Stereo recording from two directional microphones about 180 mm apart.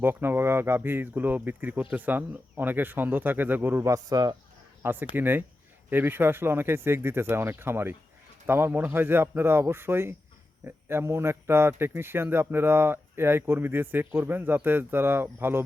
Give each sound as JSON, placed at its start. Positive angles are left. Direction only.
{"t": 0.0, "sound": "speech", "side_deg": -10}
{"t": 4.8, "sound": "speech", "side_deg": -10}